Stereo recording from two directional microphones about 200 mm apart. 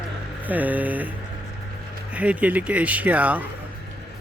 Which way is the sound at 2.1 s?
5° right (ahead or behind).